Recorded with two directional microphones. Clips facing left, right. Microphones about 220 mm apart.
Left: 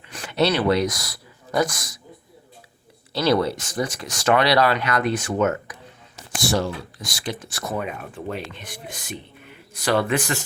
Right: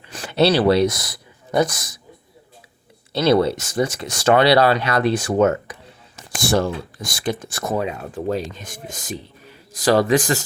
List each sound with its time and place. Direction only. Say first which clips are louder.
0.3 s speech: right 4 dB; 30° right (ahead or behind)
3.1 s speech: right 4 dB; 20° right (ahead or behind)
6.4 s speech: right 4 dB; 55° right (ahead or behind)
7.8 s speech: right 5 dB; 30° right (ahead or behind)